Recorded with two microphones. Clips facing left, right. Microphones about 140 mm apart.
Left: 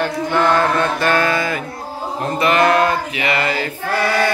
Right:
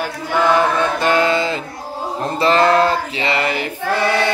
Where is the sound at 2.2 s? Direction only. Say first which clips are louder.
Right 1 dB; 30° right (ahead or behind).